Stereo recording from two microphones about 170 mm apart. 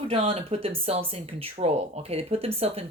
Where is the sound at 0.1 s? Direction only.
40° right (ahead or behind).